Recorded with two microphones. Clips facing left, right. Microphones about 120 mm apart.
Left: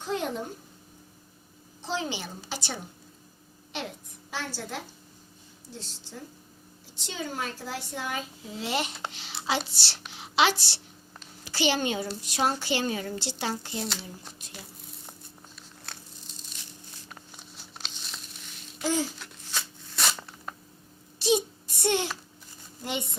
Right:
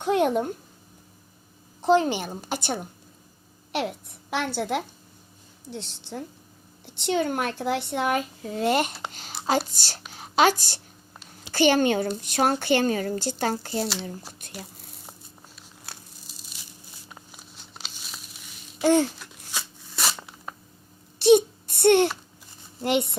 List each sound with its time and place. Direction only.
0.0 s speech: 65° right (ahead or behind)
1.8 s a woman's voice: 50° right (ahead or behind)
3.7 s a woman's voice: 65° right (ahead or behind); by 13.8 s 50° right (ahead or behind)
15.9 s tearing: 5° right (ahead or behind)
18.8 s babbling: 60° right (ahead or behind)
19.2 s a sound: 10° right (ahead or behind)
21.2 s a sound: 60° right (ahead or behind)
22.8 s speech: 65° right (ahead or behind)